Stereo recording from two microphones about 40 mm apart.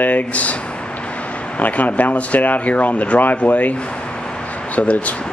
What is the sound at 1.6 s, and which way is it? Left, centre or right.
Speech, left.